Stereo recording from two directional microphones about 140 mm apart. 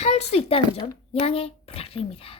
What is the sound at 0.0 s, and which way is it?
A child's voice, 50° left (ahead or behind).